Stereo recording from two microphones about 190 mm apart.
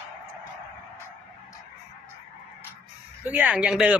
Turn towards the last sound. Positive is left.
turn(degrees=-5)  # may be behind; listen again after turning